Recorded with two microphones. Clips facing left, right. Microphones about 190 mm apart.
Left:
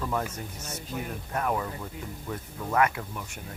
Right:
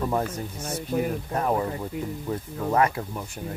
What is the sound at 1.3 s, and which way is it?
Speech, 30° right (ahead or behind).